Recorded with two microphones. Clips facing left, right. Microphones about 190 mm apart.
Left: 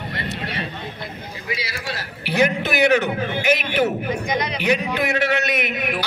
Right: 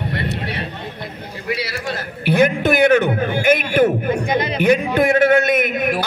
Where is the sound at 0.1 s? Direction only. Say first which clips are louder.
Right 4 dB; 60° right (ahead or behind).